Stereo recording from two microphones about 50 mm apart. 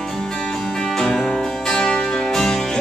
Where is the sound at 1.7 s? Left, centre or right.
Centre.